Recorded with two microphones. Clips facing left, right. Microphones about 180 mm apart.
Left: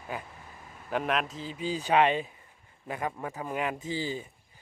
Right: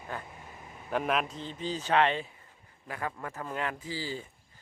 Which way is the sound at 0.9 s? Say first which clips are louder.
Even; centre (ahead or behind).